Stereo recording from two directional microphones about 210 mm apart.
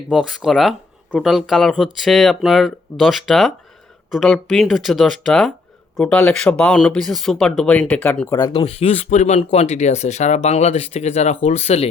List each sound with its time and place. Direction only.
0.1 s speech: centre (ahead or behind); by 11.9 s 30° left (ahead or behind)